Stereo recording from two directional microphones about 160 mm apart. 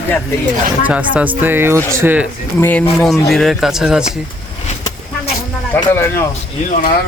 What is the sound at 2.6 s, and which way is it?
Speech, 10° left (ahead or behind).